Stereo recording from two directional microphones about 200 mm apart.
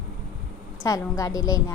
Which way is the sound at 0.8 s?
15° left (ahead or behind).